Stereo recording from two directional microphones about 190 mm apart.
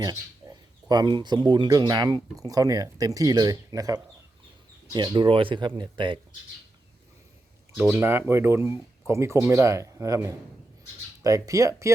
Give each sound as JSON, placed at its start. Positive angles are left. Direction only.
{"t": 0.0, "sound": "speech", "side_deg": -20}
{"t": 7.8, "sound": "a man's voice", "side_deg": -10}